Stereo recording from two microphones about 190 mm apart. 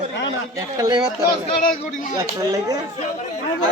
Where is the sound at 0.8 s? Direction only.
20° right (ahead or behind).